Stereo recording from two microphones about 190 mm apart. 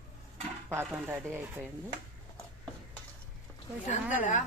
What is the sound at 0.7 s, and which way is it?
Speech, 10° right (ahead or behind).